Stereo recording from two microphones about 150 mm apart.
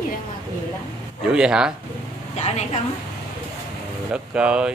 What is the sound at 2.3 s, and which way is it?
Speech, 45° left (ahead or behind).